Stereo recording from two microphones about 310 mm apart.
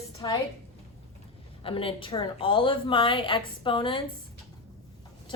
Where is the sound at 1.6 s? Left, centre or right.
Centre.